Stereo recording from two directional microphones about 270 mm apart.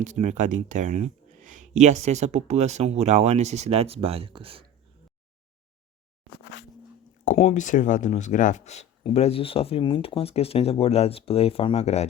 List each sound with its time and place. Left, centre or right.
0.0 s speech: right
7.3 s speech: left